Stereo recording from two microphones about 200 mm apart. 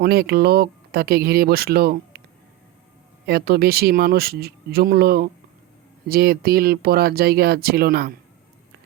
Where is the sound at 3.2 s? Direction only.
50° right (ahead or behind).